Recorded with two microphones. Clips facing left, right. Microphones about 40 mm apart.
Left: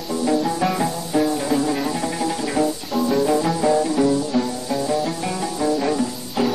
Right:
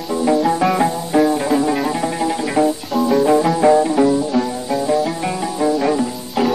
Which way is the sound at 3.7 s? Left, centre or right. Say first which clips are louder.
Right 4 dB; right.